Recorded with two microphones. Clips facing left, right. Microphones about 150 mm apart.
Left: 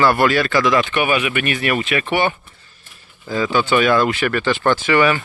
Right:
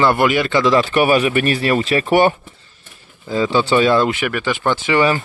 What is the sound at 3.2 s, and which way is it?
Speech, 25° right (ahead or behind).